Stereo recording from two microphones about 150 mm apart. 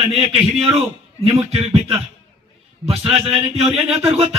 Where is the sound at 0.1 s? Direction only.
40° right (ahead or behind).